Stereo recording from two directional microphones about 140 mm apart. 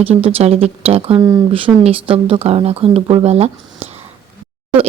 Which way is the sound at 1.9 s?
40° right (ahead or behind).